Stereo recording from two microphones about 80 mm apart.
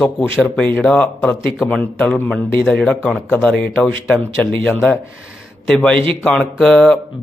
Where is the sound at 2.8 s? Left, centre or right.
Centre.